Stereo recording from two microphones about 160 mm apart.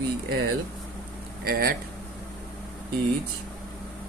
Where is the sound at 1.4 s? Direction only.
70° right (ahead or behind).